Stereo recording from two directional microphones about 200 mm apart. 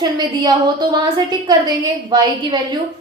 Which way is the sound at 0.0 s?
20° right (ahead or behind).